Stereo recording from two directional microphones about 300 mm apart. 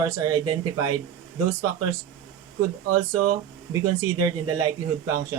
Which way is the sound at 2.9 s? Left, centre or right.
Right.